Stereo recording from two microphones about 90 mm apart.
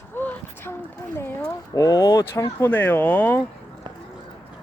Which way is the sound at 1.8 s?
50° left (ahead or behind).